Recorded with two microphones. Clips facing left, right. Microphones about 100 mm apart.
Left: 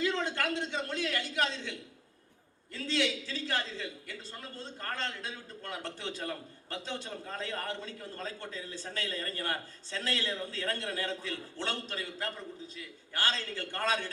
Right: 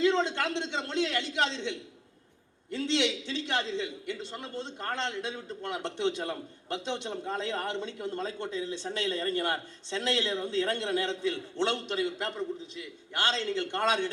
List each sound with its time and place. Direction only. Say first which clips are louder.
0.0 s a man's voice: right 5 dB; 25° right (ahead or behind)